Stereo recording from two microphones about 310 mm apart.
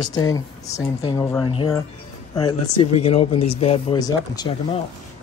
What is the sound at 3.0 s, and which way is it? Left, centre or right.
Speech, centre.